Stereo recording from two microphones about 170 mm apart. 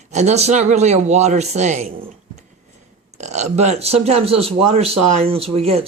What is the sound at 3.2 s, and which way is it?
Speech, 40° right (ahead or behind).